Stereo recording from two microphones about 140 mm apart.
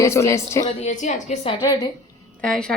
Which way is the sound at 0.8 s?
60° left (ahead or behind).